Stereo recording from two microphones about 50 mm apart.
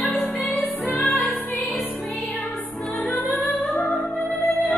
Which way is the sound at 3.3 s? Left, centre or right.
Left.